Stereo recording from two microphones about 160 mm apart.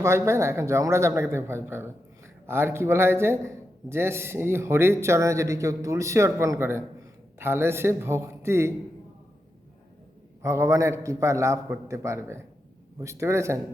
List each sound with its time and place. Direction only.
0.0 s a man's voice: 20° right (ahead or behind)
10.4 s a man's voice: 20° right (ahead or behind)